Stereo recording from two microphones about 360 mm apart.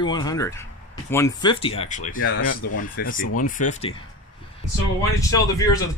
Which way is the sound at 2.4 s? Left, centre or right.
Left.